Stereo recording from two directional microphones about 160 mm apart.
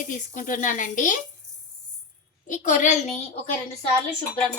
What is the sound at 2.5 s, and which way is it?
Speech, 50° left (ahead or behind).